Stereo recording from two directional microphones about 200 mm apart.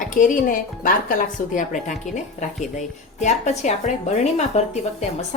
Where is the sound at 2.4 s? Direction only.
35° left (ahead or behind).